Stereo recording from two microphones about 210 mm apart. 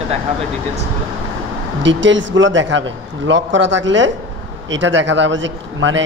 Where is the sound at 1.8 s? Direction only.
60° right (ahead or behind).